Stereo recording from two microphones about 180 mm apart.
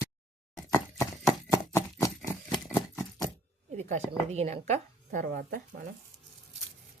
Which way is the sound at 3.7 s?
40° right (ahead or behind).